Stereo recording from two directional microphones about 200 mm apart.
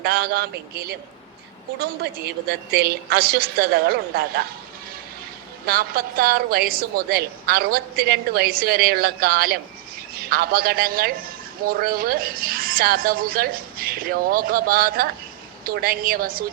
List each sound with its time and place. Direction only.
0.0 s a woman's voice: 50° right (ahead or behind)
5.6 s a woman's voice: 45° right (ahead or behind)